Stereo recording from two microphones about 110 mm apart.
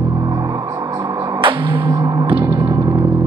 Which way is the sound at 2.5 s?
40° right (ahead or behind).